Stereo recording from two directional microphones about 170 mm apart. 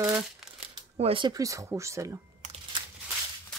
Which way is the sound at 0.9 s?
30° right (ahead or behind).